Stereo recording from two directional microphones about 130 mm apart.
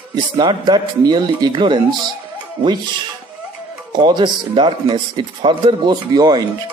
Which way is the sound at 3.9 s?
35° right (ahead or behind).